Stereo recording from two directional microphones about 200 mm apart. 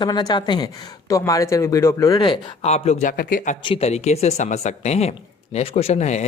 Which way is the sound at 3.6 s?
30° left (ahead or behind).